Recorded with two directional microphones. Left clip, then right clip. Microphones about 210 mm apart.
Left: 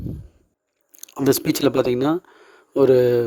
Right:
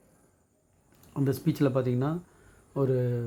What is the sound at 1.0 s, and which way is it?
Speech, 50° left (ahead or behind).